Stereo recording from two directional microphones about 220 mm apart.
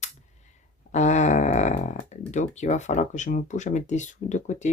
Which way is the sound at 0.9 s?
30° left (ahead or behind).